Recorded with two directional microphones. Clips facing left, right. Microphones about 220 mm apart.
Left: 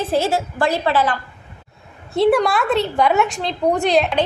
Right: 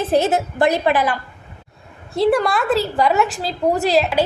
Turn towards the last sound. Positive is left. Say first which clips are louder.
# even
turn(degrees=-5)  # may be behind; listen again after turning